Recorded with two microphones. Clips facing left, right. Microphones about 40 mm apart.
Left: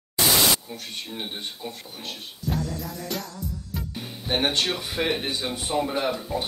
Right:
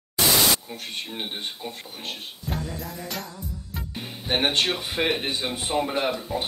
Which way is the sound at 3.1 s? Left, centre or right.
Centre.